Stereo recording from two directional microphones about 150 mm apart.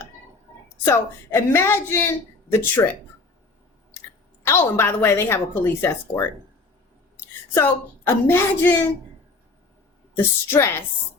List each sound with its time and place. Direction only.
0.9 s a woman's voice: 15° left (ahead or behind)
4.4 s a woman's voice: 15° left (ahead or behind)
7.5 s a woman's voice: 15° left (ahead or behind)
10.2 s a woman's voice: 15° left (ahead or behind)